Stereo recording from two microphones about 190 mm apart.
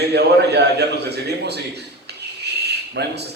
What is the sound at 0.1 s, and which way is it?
A man's voice, 60° right (ahead or behind).